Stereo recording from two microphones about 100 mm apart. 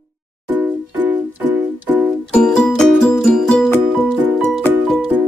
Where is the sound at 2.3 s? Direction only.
5° left (ahead or behind).